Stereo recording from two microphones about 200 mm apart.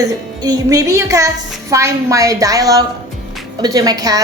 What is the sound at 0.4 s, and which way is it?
A woman's voice, 20° right (ahead or behind).